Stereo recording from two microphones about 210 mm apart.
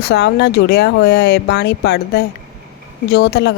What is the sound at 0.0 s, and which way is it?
Speech, 55° left (ahead or behind).